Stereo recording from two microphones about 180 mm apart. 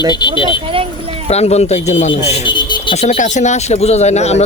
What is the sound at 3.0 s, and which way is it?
Speech, 40° left (ahead or behind).